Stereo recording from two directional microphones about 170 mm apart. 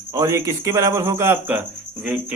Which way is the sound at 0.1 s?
15° right (ahead or behind).